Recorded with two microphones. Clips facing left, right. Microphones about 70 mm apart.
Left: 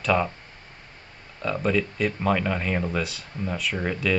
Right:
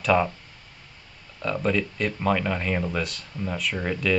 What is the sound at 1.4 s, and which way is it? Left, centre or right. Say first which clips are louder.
Speech: left 1 dB; centre.